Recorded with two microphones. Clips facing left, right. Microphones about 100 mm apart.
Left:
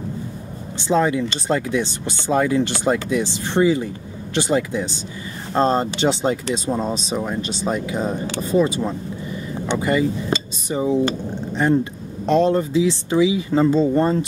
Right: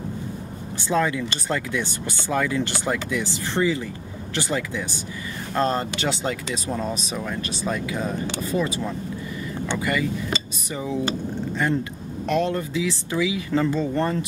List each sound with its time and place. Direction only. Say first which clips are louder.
0.7 s speech: left 4 dB; 20° left (ahead or behind)